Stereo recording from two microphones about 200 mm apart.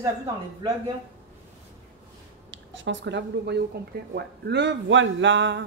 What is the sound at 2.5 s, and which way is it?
A woman's voice, 70° right (ahead or behind).